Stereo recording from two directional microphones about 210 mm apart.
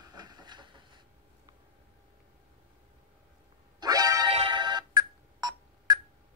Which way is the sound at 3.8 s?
20° right (ahead or behind).